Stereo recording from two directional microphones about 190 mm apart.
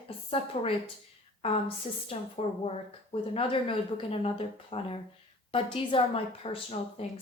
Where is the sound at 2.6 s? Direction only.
30° left (ahead or behind).